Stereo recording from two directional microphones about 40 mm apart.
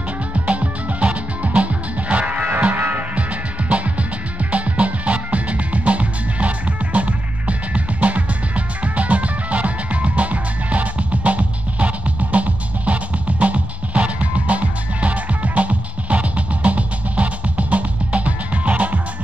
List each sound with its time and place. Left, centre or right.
0.3 s music: right
2.5 s music: right
3.2 s music: right